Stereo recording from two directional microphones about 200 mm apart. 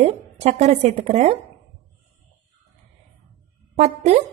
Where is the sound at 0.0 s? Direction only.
35° right (ahead or behind).